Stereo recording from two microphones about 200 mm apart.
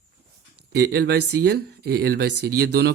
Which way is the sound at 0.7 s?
55° right (ahead or behind).